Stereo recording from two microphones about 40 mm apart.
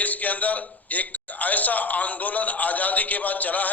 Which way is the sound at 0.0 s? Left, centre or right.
Left.